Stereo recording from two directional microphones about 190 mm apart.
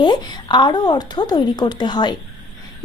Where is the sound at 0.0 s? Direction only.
25° left (ahead or behind).